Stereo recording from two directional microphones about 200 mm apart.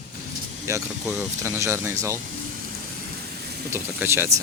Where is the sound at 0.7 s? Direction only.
10° right (ahead or behind).